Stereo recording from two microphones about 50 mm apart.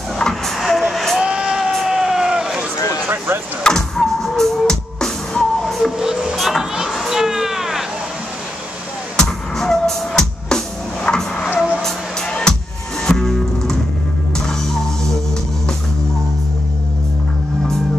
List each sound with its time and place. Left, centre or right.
0.2 s a sound: centre
0.9 s vehicle: centre
1.2 s vehicle: right
1.7 s vehicle: centre
3.6 s music: centre
5.9 s music: centre
6.3 s music: centre
6.6 s a sound: centre
9.1 s music: centre
11.1 s a sound: centre
11.8 s music: centre